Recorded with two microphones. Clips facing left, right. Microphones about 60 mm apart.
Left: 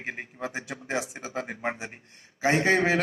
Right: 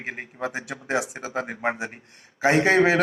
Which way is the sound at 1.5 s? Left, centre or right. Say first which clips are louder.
Right 5 dB; right.